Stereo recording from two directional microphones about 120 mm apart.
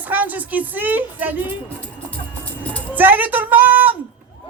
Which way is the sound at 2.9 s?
15° right (ahead or behind).